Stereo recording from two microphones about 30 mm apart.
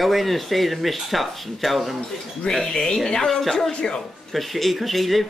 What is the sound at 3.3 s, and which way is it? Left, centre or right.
Speech, centre.